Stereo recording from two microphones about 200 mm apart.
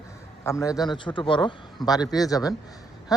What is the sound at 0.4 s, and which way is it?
A man's voice, 15° left (ahead or behind).